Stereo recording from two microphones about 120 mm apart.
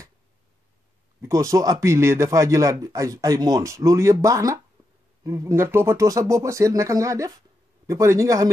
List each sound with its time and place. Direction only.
1.2 s speech: 25° right (ahead or behind)